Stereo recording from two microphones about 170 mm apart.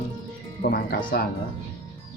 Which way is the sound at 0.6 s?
60° left (ahead or behind).